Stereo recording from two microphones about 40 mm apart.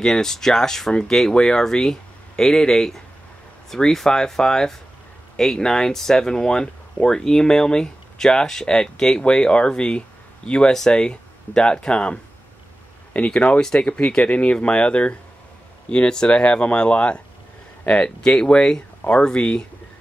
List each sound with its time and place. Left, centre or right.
0.0 s speech: centre